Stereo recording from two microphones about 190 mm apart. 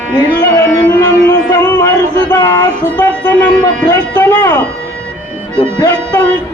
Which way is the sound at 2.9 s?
10° left (ahead or behind).